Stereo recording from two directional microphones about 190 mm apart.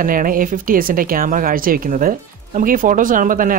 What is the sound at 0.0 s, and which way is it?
Speech, 45° right (ahead or behind).